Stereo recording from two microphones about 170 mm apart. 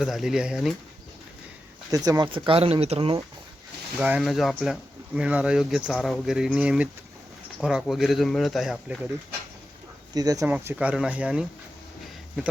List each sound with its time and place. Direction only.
0.0 s speech: centre (ahead or behind)
1.9 s speech: 20° right (ahead or behind)
4.0 s speech: 5° right (ahead or behind)
10.2 s speech: 20° right (ahead or behind)